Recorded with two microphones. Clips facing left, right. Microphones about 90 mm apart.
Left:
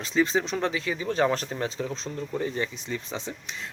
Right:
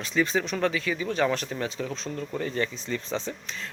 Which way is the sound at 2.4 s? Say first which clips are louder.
Right 2 dB; 15° left (ahead or behind).